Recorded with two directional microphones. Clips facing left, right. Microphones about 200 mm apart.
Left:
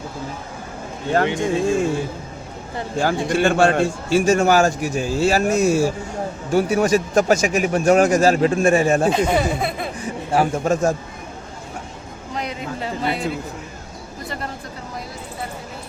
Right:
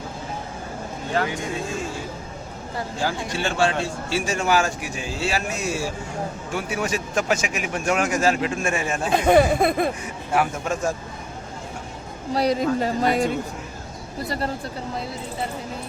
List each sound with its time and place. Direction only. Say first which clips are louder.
1.2 s speech: left 6 dB; 25° left (ahead or behind)
3.0 s a man's voice: left 8 dB; 55° left (ahead or behind); by 9.0 s 40° left (ahead or behind)
9.3 s speech: right 4 dB; 50° right (ahead or behind)
10.0 s speech: left 4 dB; 30° left (ahead or behind)
12.3 s speech: right 8 dB; 35° right (ahead or behind)